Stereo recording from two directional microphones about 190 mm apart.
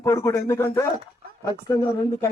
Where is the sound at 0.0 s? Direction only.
15° left (ahead or behind).